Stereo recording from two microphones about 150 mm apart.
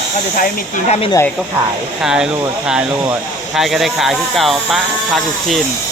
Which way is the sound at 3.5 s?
Centre (ahead or behind).